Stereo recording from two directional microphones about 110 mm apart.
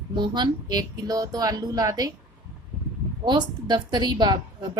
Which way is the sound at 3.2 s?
45° right (ahead or behind).